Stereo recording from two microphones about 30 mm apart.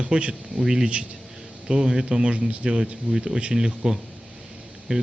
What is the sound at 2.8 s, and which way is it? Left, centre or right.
Speech, centre.